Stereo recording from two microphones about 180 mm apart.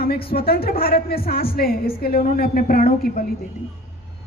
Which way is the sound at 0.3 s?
60° left (ahead or behind).